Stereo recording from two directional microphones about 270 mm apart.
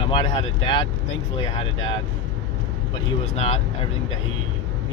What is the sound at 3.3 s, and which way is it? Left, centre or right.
Speech, left.